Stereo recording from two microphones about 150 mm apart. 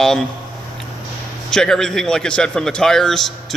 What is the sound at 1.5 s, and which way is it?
A man's voice, 5° left (ahead or behind).